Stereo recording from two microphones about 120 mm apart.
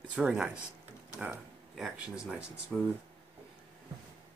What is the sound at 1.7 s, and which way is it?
Speech, centre (ahead or behind).